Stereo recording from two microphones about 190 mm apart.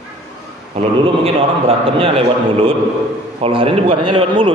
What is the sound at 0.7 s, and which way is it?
A man's voice, 30° right (ahead or behind).